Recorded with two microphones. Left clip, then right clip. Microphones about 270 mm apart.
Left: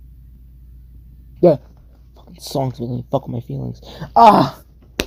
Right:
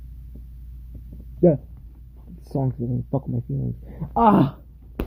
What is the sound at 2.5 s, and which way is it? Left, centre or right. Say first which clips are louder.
Speech: left 5 dB; left.